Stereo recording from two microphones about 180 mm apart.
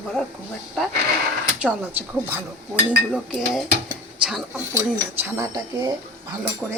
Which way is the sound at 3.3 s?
5° right (ahead or behind).